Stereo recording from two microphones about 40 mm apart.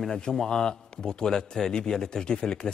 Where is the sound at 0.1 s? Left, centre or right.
Centre.